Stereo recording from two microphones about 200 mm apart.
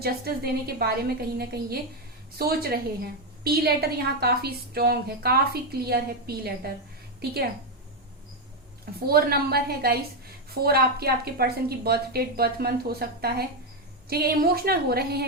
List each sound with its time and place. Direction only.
0.0 s a woman's voice: 50° right (ahead or behind)
9.0 s a woman's voice: 50° right (ahead or behind)